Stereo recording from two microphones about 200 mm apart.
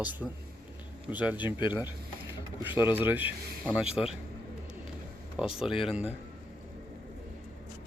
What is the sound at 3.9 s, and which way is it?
Speech, 30° left (ahead or behind).